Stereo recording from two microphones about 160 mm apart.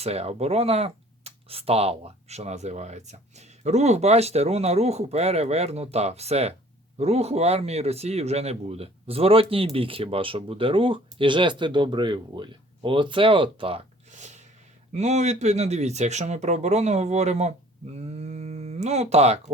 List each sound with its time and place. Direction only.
0.0 s speech: 40° right (ahead or behind)
14.1 s a sound: 45° right (ahead or behind)
14.9 s speech: 45° right (ahead or behind)